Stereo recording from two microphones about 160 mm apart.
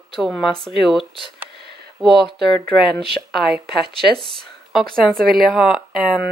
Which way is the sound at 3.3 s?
Centre (ahead or behind).